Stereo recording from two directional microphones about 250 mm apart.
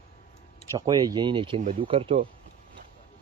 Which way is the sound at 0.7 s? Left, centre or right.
Centre.